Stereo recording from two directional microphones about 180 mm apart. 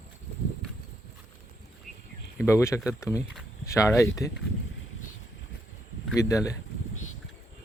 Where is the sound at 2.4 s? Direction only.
15° left (ahead or behind).